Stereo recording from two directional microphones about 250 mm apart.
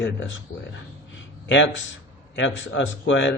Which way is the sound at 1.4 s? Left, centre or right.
Left.